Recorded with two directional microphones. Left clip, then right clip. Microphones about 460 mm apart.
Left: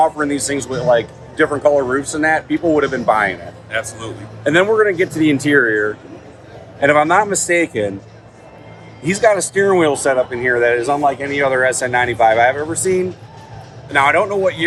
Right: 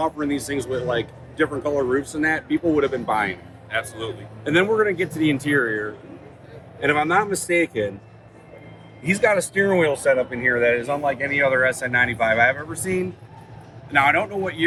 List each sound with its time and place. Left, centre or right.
0.0 s speech: centre
3.7 s a man's voice: centre
4.4 s speech: centre
9.0 s speech: centre